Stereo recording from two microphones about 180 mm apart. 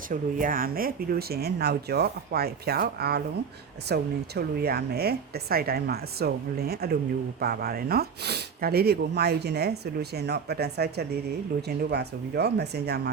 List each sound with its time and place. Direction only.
0.1 s speech: 50° right (ahead or behind); by 13.0 s 65° right (ahead or behind)